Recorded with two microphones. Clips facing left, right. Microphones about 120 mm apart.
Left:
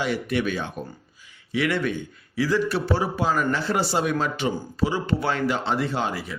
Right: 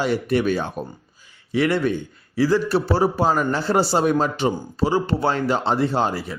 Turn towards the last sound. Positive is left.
turn(degrees=-35)  # may be behind; listen again after turning